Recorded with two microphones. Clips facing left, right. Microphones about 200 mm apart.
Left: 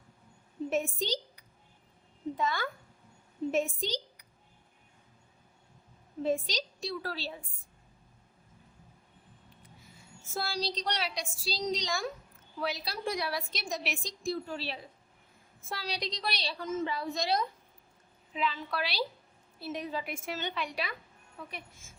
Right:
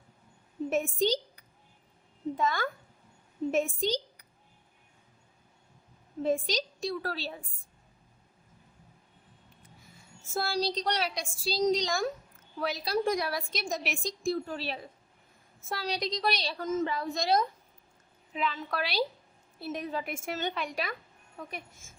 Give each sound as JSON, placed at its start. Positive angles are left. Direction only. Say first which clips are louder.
{"t": 0.7, "sound": "a woman's voice", "louder": "right 4 dB", "side_deg": -50}
{"t": 6.2, "sound": "a woman's voice", "louder": "right 2 dB", "side_deg": -50}
{"t": 10.3, "sound": "a woman's voice", "louder": "right 4 dB", "side_deg": -50}